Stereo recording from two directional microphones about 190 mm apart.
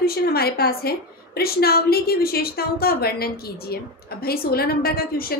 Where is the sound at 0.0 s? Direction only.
55° left (ahead or behind).